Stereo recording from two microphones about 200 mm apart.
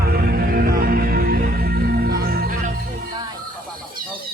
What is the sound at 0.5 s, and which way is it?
Music, 45° right (ahead or behind).